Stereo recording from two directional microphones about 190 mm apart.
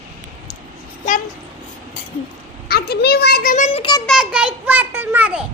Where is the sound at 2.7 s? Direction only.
55° left (ahead or behind); by 3.8 s 40° left (ahead or behind).